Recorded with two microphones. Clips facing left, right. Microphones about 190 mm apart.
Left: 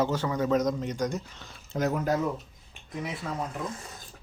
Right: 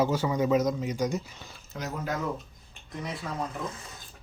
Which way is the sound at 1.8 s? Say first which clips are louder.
Left 8 dB; 60° left (ahead or behind).